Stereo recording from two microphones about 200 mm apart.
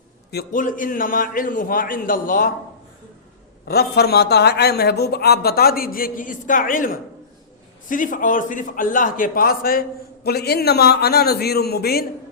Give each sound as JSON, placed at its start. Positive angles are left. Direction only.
{"t": 0.3, "sound": "a man's voice", "side_deg": 45}
{"t": 3.7, "sound": "a man's voice", "side_deg": 50}